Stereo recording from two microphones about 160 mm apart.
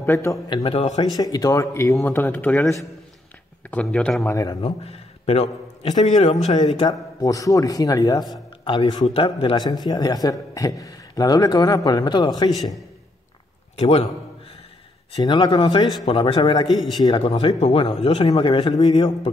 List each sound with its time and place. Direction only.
0.0 s speech: 15° left (ahead or behind)
0.7 s speech: 40° left (ahead or behind)
0.9 s a man's voice: 25° left (ahead or behind)
3.7 s speech: 5° left (ahead or behind)
4.6 s a man's voice: 35° left (ahead or behind)
13.7 s a man's voice: 35° left (ahead or behind)
15.1 s a man's voice: 30° left (ahead or behind)